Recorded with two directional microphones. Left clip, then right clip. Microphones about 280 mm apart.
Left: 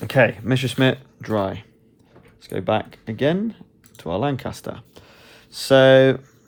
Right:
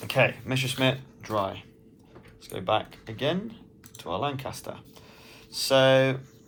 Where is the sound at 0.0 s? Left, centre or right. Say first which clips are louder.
Left 6 dB; left.